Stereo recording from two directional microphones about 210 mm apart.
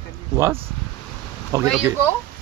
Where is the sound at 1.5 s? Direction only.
15° right (ahead or behind).